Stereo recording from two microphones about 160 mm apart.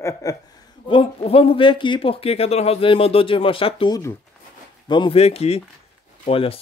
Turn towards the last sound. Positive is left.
turn(degrees=35)  # may be behind; listen again after turning